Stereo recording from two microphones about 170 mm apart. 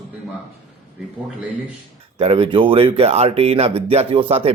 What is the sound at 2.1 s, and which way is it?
Speech, 35° right (ahead or behind).